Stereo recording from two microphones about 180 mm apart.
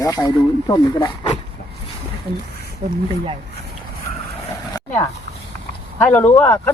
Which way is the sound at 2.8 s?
50° right (ahead or behind).